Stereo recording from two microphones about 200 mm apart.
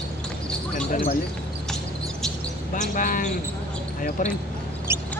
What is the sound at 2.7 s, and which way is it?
Speech, 40° left (ahead or behind).